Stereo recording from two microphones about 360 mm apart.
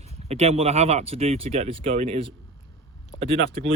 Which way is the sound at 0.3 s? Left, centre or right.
Centre.